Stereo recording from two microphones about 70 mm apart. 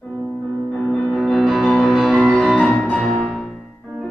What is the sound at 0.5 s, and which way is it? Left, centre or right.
Music, centre.